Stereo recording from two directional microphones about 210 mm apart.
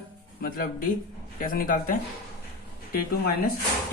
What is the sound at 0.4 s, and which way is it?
A man's voice, 40° left (ahead or behind).